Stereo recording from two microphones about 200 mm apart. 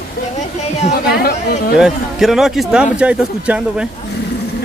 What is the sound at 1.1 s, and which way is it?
Speech, 55° left (ahead or behind).